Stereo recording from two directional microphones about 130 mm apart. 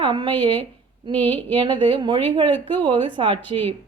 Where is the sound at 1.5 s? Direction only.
40° right (ahead or behind).